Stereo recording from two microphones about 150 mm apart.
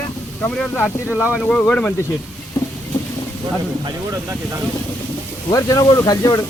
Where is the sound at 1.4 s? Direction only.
10° left (ahead or behind).